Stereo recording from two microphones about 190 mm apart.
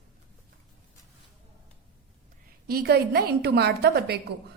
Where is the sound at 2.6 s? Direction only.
55° right (ahead or behind).